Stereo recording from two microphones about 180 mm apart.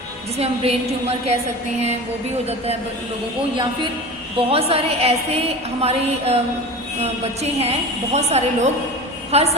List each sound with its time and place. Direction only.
0.3 s a woman's voice: 35° right (ahead or behind)
4.4 s a woman's voice: 30° right (ahead or behind)